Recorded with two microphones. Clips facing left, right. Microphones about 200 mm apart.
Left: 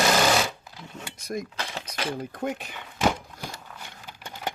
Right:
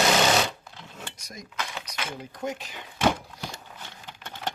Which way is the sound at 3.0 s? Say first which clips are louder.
Right 1 dB; 5° left (ahead or behind).